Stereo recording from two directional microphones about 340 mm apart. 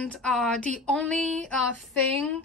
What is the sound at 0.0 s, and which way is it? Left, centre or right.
Speech, centre.